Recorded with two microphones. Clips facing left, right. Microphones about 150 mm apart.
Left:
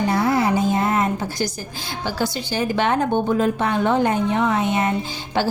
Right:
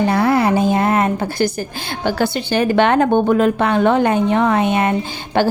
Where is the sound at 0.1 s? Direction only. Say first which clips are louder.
Right 4 dB; 65° right (ahead or behind).